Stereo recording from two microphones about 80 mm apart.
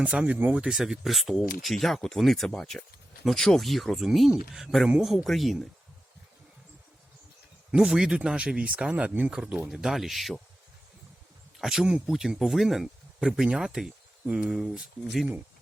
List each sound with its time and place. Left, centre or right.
0.0 s speech: centre
0.7 s speech: centre
7.7 s speech: centre
11.6 s speech: centre